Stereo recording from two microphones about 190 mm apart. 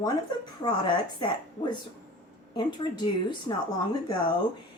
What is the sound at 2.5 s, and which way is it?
A woman's voice, 25° left (ahead or behind).